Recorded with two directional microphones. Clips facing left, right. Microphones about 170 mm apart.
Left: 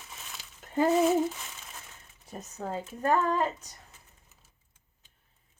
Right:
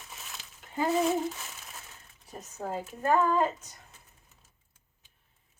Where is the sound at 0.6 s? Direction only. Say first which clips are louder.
Left 12 dB; 40° left (ahead or behind).